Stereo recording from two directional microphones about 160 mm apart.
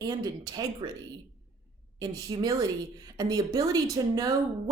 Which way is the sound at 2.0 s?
25° right (ahead or behind).